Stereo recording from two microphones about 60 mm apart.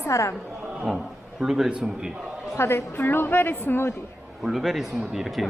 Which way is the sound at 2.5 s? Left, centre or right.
Left.